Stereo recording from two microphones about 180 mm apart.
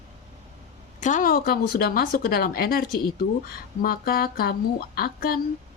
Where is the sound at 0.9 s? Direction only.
45° left (ahead or behind).